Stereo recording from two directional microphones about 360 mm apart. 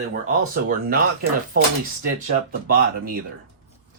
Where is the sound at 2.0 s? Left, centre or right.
Right.